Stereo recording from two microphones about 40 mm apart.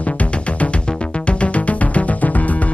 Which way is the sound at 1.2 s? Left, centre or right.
Left.